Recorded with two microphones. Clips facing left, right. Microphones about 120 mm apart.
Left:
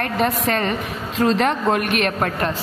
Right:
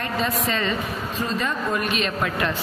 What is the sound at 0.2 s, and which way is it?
Speech, 55° left (ahead or behind).